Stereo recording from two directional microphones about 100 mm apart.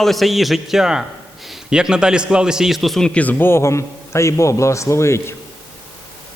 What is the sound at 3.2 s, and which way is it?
A man's voice, 15° left (ahead or behind).